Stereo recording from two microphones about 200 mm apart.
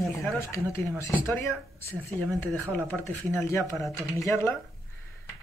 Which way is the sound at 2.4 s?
5° left (ahead or behind).